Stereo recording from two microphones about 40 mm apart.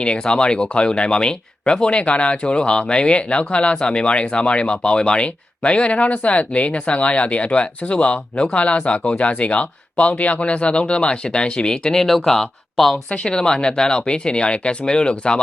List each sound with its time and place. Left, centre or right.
0.0 s speech: left; by 13.0 s centre
13.1 s speech: left